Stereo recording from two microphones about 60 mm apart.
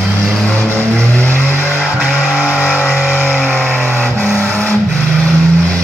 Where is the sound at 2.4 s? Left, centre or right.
Right.